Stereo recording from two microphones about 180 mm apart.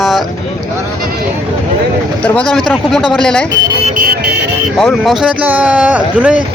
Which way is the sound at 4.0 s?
55° right (ahead or behind).